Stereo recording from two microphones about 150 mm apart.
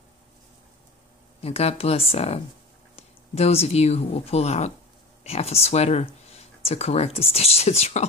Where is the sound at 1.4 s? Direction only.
45° left (ahead or behind).